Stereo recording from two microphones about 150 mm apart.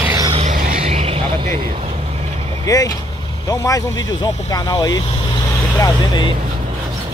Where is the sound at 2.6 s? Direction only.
25° left (ahead or behind).